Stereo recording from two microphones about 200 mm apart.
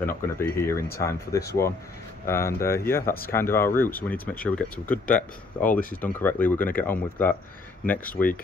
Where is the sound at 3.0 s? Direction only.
50° left (ahead or behind).